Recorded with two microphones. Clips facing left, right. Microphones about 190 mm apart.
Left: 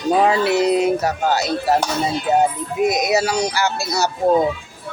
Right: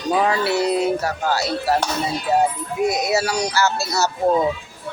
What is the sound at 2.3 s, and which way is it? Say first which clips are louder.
Music: left 1 dB; 20° left (ahead or behind).